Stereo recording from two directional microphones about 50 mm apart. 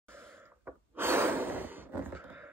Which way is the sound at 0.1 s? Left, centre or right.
Right.